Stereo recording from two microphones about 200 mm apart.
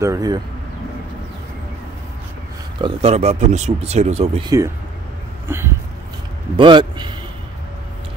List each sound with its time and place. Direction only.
0.0 s speech: 15° right (ahead or behind)
2.8 s speech: 30° right (ahead or behind)
4.5 s speech: 15° right (ahead or behind)
6.5 s a man's voice: 25° right (ahead or behind)